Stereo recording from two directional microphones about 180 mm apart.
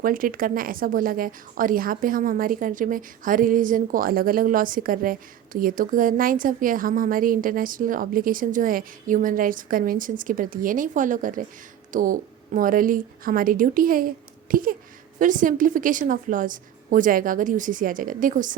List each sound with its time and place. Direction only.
0.0 s a woman's voice: 50° right (ahead or behind)